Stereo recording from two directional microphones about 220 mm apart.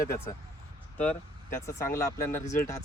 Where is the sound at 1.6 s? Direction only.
15° left (ahead or behind).